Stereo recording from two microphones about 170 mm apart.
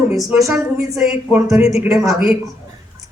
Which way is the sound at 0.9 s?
Centre (ahead or behind).